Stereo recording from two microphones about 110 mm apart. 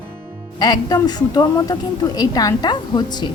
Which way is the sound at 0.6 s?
35° left (ahead or behind).